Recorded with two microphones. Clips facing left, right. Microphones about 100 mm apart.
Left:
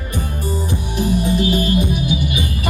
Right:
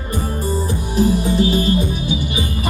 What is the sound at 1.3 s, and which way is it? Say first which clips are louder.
Music: right 1 dB; 30° right (ahead or behind).